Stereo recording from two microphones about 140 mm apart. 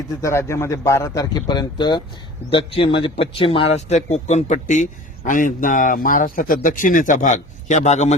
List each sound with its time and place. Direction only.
0.2 s a man's voice: 20° left (ahead or behind); by 8.1 s 55° left (ahead or behind)